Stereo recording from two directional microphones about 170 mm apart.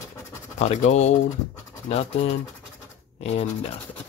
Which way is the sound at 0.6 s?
40° left (ahead or behind).